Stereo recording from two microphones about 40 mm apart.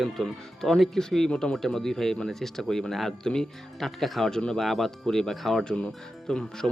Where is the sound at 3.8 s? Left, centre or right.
Centre.